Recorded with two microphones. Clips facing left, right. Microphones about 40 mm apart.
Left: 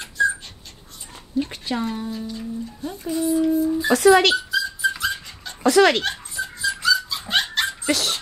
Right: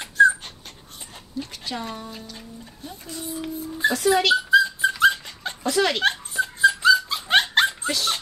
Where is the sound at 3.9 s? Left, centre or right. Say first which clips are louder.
Left 4 dB; left.